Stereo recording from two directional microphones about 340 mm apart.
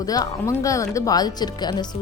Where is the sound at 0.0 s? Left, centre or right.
Centre.